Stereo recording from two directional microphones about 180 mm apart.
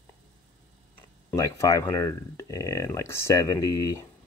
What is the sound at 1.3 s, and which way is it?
Speech, 15° left (ahead or behind).